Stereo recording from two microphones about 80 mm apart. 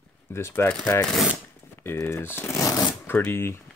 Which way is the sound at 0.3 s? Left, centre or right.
Left.